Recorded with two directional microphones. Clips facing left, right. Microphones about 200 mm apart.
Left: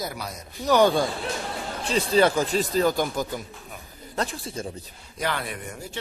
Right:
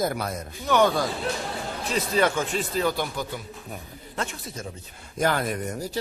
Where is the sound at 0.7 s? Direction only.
35° left (ahead or behind).